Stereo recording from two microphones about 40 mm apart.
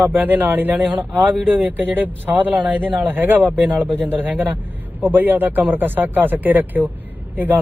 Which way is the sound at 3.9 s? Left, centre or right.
Right.